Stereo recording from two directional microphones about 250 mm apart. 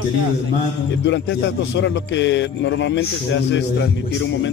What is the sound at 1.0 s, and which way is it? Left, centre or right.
A man's voice, left.